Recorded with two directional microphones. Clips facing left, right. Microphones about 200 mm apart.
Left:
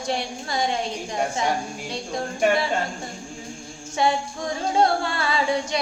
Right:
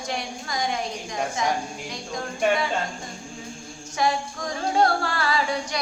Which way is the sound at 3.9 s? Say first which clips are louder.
Left 2 dB; 25° left (ahead or behind).